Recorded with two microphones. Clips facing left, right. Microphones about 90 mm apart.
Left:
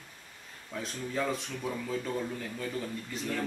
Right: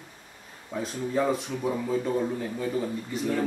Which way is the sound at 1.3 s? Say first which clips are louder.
Right 7 dB; 5° right (ahead or behind).